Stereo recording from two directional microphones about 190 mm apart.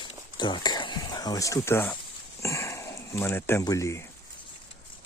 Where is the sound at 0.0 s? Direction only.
25° left (ahead or behind).